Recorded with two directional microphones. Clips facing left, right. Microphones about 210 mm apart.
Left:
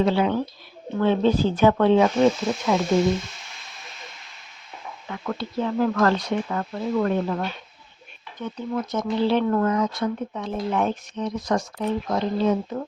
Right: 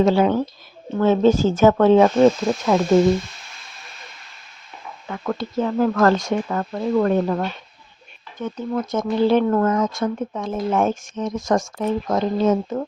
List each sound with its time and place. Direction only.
0.0 s speech: 45° right (ahead or behind)
5.0 s speech: 50° right (ahead or behind)